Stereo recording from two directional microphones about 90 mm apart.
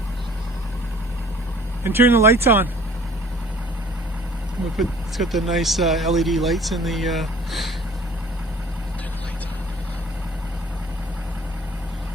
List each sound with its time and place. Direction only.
1.8 s speech: 25° right (ahead or behind)
4.8 s speech: centre (ahead or behind)